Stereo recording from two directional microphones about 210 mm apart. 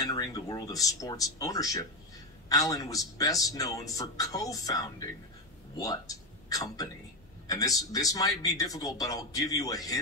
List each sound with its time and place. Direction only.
0.0 s a man's voice: 15° left (ahead or behind)